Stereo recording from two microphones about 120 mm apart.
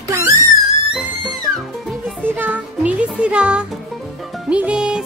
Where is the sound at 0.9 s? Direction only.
5° right (ahead or behind).